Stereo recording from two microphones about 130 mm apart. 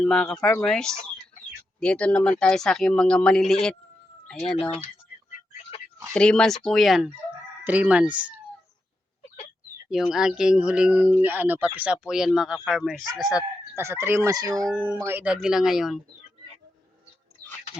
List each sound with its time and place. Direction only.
0.0 s speech: 5° left (ahead or behind)
6.1 s speech: 5° left (ahead or behind)
7.6 s speech: 10° right (ahead or behind)
9.9 s speech: 5° right (ahead or behind)
13.7 s chicken: 20° right (ahead or behind)
14.8 s speech: 20° right (ahead or behind); by 16.0 s 5° right (ahead or behind)